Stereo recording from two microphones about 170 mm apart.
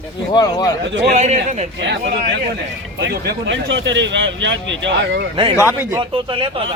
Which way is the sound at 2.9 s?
80° right.